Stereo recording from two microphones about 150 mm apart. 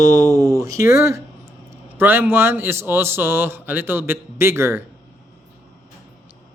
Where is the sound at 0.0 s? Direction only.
20° right (ahead or behind).